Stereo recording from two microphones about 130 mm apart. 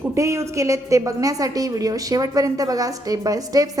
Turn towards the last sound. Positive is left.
turn(degrees=-30)  # may be behind; listen again after turning